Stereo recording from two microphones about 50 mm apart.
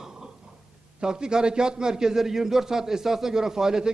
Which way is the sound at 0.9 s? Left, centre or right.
Centre.